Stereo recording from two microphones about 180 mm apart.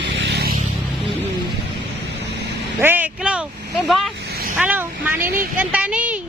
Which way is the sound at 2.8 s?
10° right (ahead or behind).